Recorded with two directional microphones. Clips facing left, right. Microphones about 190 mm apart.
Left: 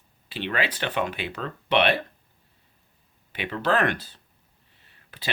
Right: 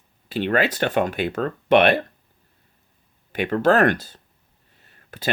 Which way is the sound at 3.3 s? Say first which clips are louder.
Right 7 dB; 45° right (ahead or behind).